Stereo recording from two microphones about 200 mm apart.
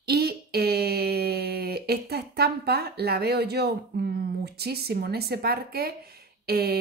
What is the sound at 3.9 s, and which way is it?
A woman's voice, 50° right (ahead or behind).